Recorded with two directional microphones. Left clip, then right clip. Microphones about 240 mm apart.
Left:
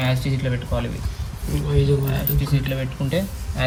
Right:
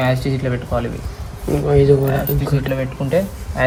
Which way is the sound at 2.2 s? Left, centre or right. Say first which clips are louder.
Right 6 dB; left.